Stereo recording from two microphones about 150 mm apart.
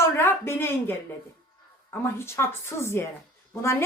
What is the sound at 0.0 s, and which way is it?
A woman's voice, 15° left (ahead or behind).